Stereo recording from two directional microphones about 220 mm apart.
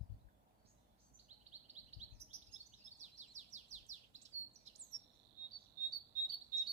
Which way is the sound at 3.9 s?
30° right (ahead or behind).